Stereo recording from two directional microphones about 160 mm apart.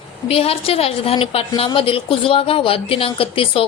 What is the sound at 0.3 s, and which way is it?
A woman's voice, 40° left (ahead or behind).